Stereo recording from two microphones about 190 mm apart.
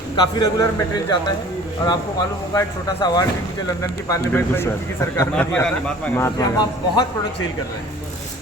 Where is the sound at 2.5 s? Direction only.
20° left (ahead or behind).